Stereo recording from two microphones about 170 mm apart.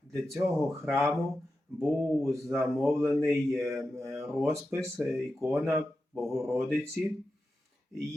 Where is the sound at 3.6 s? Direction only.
15° right (ahead or behind).